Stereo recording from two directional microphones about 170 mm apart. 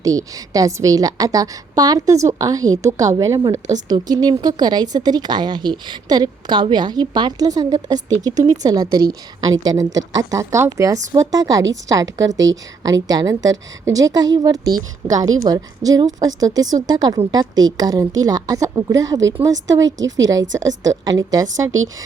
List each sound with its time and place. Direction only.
0.0 s a woman's voice: 20° right (ahead or behind)
20.0 s a woman's voice: 90° right
20.6 s a woman's voice: 20° right (ahead or behind)